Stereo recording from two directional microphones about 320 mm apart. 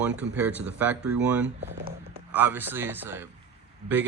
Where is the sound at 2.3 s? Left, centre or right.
Centre.